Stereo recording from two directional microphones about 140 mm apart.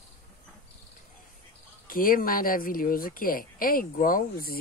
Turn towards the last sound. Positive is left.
turn(degrees=90)